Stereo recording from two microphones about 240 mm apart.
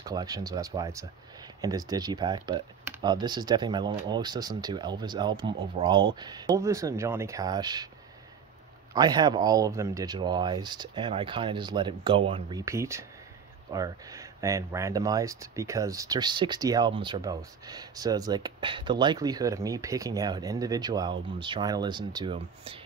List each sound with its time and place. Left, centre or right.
0.0 s speech: centre
8.9 s speech: centre